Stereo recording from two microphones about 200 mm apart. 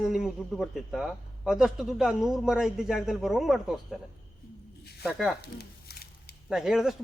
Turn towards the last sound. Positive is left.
turn(degrees=-5)  # may be behind; listen again after turning